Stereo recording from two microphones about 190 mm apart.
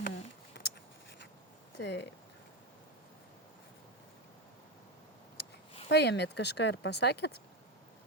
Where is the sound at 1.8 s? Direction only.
65° left (ahead or behind).